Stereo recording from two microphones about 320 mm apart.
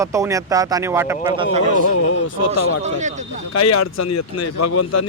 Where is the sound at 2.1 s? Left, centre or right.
Left.